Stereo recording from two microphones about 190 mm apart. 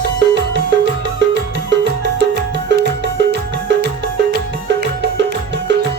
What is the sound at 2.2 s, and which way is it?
Music, 60° right (ahead or behind).